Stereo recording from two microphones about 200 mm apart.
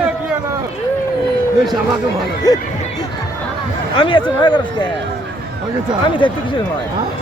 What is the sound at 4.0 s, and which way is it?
Speech, 25° left (ahead or behind).